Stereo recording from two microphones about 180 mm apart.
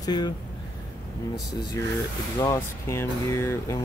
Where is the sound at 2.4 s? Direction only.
15° left (ahead or behind).